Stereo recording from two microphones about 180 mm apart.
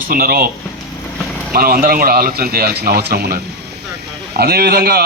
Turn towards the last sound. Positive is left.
turn(degrees=-60)  # may be behind; listen again after turning